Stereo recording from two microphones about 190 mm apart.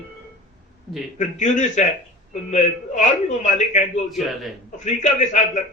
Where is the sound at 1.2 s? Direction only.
40° left (ahead or behind).